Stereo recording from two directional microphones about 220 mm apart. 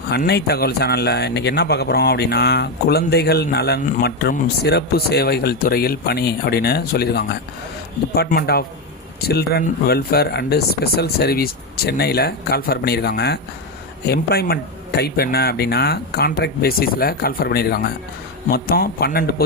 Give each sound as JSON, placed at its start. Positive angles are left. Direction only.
{"t": 0.1, "sound": "speech", "side_deg": 50}